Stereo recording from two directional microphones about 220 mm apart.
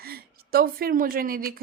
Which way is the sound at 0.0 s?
45° right (ahead or behind).